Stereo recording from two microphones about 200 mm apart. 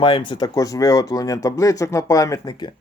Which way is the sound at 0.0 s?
25° left (ahead or behind).